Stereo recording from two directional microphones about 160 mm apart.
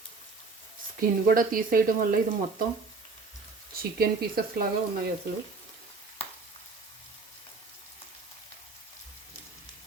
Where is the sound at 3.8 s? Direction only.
70° right (ahead or behind).